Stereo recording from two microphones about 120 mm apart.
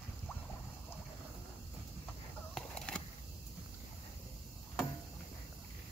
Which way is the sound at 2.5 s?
10° left (ahead or behind).